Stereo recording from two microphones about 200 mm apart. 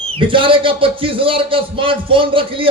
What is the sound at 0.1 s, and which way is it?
Speech, 25° right (ahead or behind).